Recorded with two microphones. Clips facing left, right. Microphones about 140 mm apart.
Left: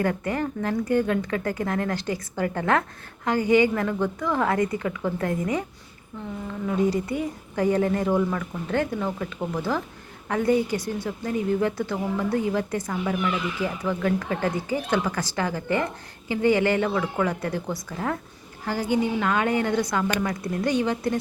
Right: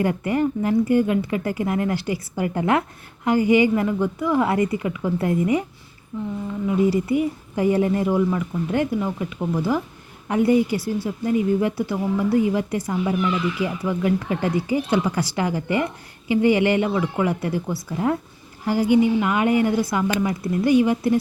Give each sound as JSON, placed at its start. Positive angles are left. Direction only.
{"t": 0.0, "sound": "speech", "side_deg": -10}